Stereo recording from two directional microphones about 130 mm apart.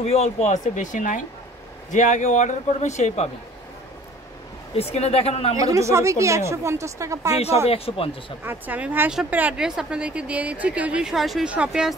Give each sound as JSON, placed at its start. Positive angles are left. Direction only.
{"t": 0.0, "sound": "a man's voice", "side_deg": 55}
{"t": 1.9, "sound": "a man's voice", "side_deg": 70}
{"t": 4.7, "sound": "speech", "side_deg": 50}
{"t": 5.6, "sound": "speech", "side_deg": -25}
{"t": 7.6, "sound": "speech", "side_deg": 45}
{"t": 8.5, "sound": "a woman's voice", "side_deg": -15}